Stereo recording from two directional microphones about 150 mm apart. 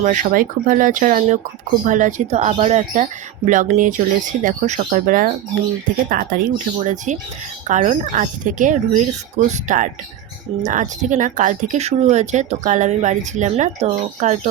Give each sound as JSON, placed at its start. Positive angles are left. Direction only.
{"t": 0.0, "sound": "speech", "side_deg": -55}